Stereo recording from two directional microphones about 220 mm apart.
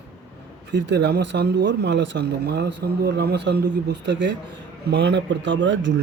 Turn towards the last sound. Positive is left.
turn(degrees=-55)  # may be behind; listen again after turning